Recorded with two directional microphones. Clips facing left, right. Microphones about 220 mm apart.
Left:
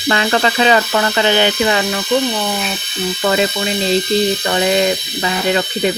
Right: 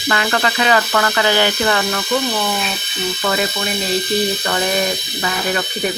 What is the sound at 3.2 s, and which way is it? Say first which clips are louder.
Speech: left 5 dB; 25° left (ahead or behind).